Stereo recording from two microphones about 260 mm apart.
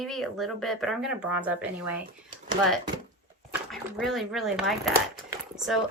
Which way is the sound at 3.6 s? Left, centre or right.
Centre.